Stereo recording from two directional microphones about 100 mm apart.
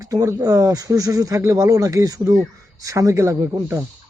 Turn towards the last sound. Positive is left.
turn(degrees=-30)  # may be behind; listen again after turning